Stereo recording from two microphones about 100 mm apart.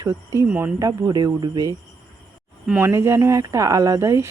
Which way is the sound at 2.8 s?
25° right (ahead or behind).